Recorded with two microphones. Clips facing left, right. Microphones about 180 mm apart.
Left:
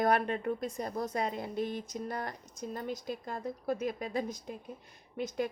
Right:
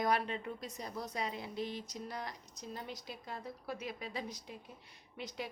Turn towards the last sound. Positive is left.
turn(degrees=50)  # may be behind; listen again after turning